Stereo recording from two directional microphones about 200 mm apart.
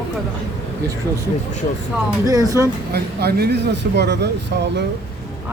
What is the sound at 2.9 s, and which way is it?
Speech, 50° right (ahead or behind).